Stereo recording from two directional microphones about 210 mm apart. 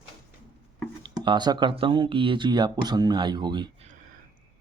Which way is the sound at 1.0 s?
20° right (ahead or behind).